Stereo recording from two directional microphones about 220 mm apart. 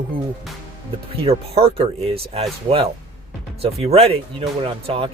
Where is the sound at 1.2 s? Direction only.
25° right (ahead or behind).